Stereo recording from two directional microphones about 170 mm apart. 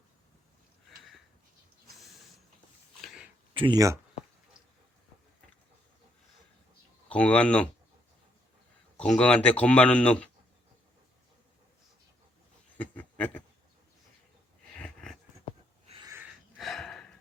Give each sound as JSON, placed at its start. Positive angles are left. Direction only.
{"t": 3.5, "sound": "speech", "side_deg": -30}
{"t": 7.1, "sound": "speech", "side_deg": 5}
{"t": 9.1, "sound": "speech", "side_deg": 5}
{"t": 12.7, "sound": "a sound", "side_deg": 10}
{"t": 14.8, "sound": "a sound", "side_deg": 5}
{"t": 16.0, "sound": "wheeze", "side_deg": -15}
{"t": 16.6, "sound": "gasp", "side_deg": 0}